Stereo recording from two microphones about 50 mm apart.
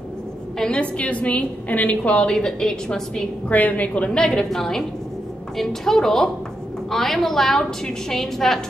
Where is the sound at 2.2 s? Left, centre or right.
Centre.